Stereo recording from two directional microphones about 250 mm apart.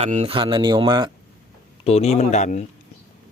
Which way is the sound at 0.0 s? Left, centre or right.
Right.